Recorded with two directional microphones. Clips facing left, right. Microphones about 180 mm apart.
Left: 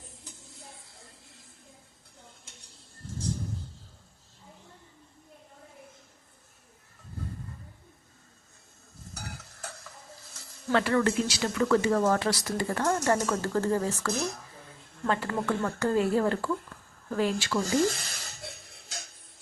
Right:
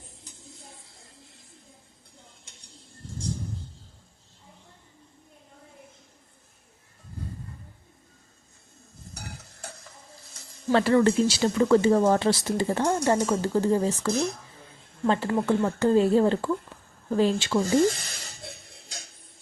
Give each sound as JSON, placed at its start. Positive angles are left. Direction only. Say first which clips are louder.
{"t": 10.7, "sound": "speech", "louder": "right 5 dB", "side_deg": -30}